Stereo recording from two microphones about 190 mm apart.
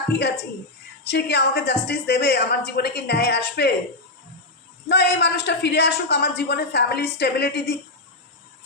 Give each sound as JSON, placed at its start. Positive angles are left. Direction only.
{"t": 1.0, "sound": "a man's voice", "side_deg": 65}
{"t": 4.9, "sound": "a man's voice", "side_deg": 65}